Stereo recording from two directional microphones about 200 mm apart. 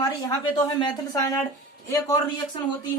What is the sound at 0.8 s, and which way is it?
A man's voice, 20° left (ahead or behind).